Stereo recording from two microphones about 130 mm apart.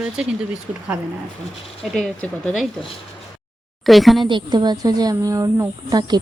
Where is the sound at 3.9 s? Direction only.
Centre (ahead or behind).